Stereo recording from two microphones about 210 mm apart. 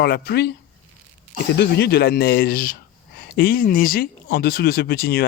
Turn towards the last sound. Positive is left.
turn(degrees=45)  # may be behind; listen again after turning